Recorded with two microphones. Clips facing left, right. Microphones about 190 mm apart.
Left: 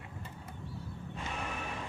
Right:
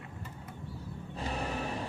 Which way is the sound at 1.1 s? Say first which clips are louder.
Right 5 dB; 35° right (ahead or behind).